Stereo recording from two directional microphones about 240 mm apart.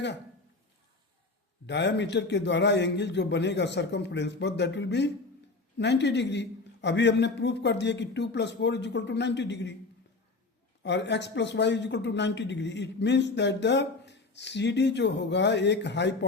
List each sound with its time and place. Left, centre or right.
1.6 s speech: left
10.8 s speech: left